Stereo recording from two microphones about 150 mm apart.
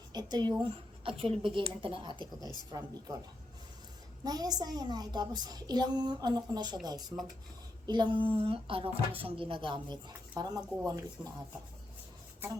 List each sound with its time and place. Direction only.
0.1 s speech: 30° right (ahead or behind)
4.2 s a woman's voice: 25° right (ahead or behind)
7.9 s speech: 30° right (ahead or behind)